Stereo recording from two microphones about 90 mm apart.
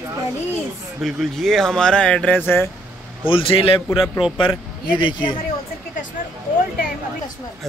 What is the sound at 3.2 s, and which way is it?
Speech, 80° left.